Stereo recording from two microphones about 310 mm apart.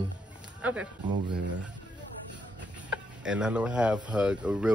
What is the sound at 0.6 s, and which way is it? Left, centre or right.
Speech, centre.